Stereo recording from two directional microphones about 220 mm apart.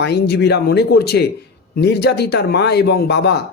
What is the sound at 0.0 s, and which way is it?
Speech, 50° left (ahead or behind).